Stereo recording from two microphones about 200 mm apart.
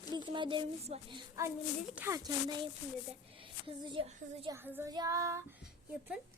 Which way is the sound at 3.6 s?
25° right (ahead or behind).